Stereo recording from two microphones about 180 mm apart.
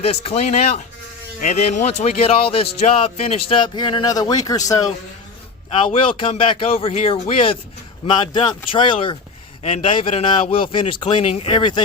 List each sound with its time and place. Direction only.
0.0 s speech: 35° left (ahead or behind)